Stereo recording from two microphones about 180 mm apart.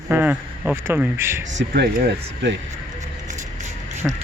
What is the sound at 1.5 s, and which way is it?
Speech, 65° right (ahead or behind).